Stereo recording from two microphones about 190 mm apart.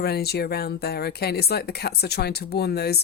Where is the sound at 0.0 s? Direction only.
55° left (ahead or behind).